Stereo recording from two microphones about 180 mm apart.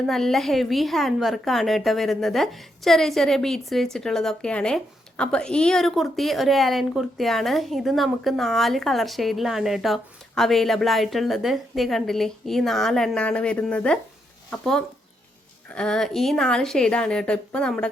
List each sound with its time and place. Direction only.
0.0 s speech: centre (ahead or behind)